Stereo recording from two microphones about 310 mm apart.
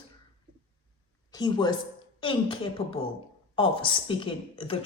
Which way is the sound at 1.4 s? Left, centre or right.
Centre.